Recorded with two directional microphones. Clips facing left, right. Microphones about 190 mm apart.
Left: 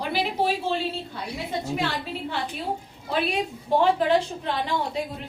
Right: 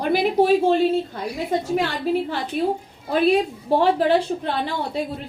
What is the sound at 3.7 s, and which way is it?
Speech, 35° right (ahead or behind).